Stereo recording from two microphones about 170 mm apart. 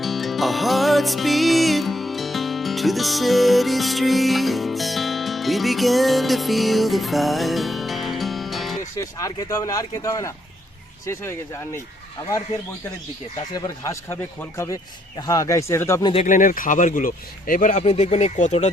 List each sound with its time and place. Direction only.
0.0 s music: centre (ahead or behind)
9.0 s speech: 20° left (ahead or behind)
13.5 s speech: 20° left (ahead or behind)
16.2 s speech: 50° left (ahead or behind)